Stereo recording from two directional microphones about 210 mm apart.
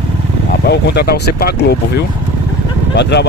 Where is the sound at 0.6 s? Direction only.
50° left (ahead or behind).